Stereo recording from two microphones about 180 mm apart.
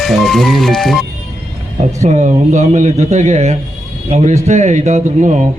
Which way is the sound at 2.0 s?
40° right (ahead or behind).